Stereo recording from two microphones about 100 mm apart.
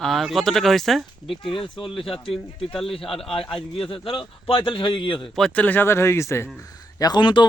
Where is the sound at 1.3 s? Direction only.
60° left (ahead or behind).